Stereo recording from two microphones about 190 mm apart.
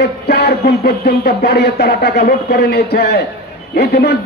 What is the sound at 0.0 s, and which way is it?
Speech, 60° left (ahead or behind).